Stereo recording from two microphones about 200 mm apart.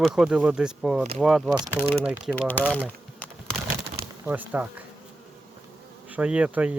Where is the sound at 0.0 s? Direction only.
Centre (ahead or behind).